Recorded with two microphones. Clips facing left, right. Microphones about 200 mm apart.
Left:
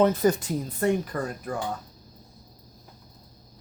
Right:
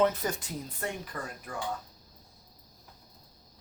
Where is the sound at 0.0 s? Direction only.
40° left (ahead or behind).